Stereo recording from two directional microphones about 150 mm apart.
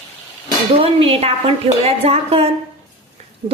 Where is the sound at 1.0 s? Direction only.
40° right (ahead or behind).